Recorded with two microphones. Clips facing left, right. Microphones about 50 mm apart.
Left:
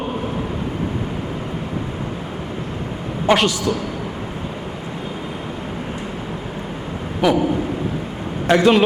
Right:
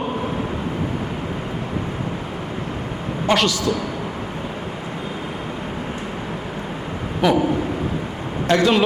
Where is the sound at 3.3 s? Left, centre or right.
Centre.